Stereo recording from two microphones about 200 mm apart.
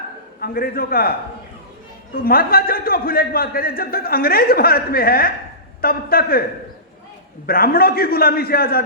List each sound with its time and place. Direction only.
0.3 s a man's voice: 50° left (ahead or behind)
2.2 s a man's voice: 45° left (ahead or behind)
7.4 s a man's voice: 50° left (ahead or behind)